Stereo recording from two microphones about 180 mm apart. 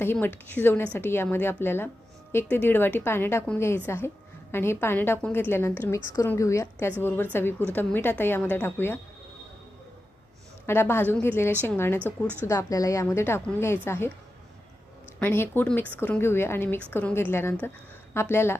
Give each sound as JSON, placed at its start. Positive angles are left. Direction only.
{"t": 0.0, "sound": "speech", "side_deg": 10}
{"t": 10.7, "sound": "speech", "side_deg": 15}
{"t": 15.2, "sound": "speech", "side_deg": 10}